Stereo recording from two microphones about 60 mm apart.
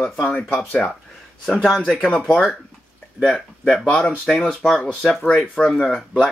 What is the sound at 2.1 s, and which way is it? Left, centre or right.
Speech, centre.